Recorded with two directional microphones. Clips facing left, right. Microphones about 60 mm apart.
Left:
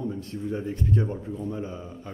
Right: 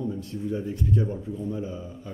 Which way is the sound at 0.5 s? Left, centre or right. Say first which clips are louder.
Even; left.